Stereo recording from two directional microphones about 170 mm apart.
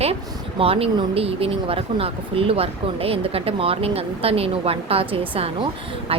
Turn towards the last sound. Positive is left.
turn(degrees=-35)  # may be behind; listen again after turning